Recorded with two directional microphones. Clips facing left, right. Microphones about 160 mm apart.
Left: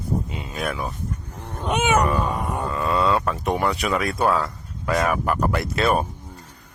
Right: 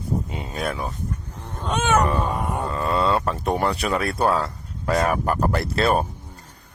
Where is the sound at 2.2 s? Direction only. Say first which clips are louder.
Even; centre (ahead or behind).